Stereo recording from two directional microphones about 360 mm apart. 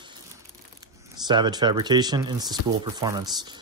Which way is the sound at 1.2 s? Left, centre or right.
Centre.